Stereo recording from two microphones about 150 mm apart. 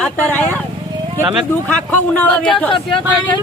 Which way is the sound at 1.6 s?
10° left (ahead or behind).